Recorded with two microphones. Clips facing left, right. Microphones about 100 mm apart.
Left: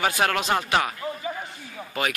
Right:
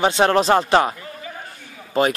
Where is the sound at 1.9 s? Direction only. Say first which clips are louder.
Right 9 dB; 30° right (ahead or behind).